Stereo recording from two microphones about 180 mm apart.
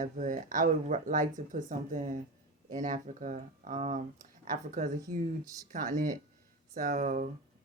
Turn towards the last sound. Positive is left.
turn(degrees=-45)  # may be behind; listen again after turning